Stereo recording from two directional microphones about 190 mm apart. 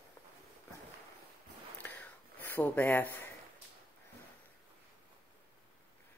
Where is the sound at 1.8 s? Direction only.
10° left (ahead or behind).